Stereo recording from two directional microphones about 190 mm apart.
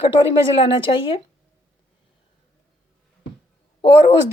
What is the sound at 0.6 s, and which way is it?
Speech, 25° left (ahead or behind).